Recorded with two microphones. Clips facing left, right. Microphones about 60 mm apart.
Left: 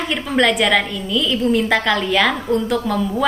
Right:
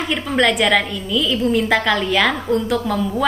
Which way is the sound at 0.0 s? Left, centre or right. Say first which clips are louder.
Even; centre.